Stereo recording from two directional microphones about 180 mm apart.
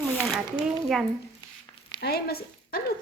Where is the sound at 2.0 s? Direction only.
60° left (ahead or behind).